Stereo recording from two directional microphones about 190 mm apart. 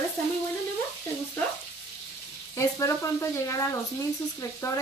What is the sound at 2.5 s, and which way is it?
Speech, 15° left (ahead or behind).